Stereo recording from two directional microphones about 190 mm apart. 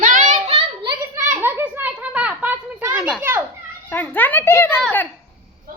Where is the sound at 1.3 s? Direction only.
10° right (ahead or behind).